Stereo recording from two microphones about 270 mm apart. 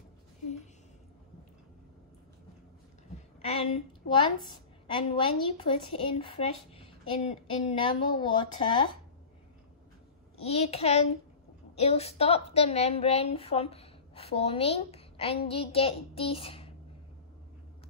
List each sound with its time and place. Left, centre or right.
4.1 s a woman's voice: centre
10.4 s a woman's voice: left